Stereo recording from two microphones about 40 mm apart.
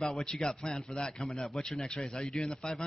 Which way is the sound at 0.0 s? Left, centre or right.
Centre.